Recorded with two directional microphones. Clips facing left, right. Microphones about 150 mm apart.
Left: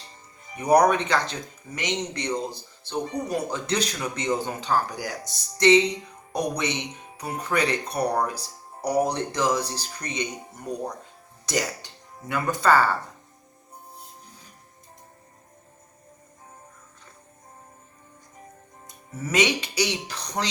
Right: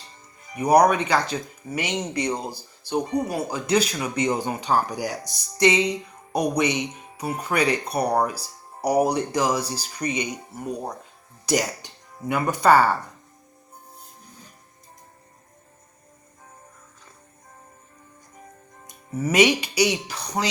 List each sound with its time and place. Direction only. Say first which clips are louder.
0.5 s speech: right 1 dB; 10° right (ahead or behind)
18.9 s speech: right 6 dB; 15° right (ahead or behind)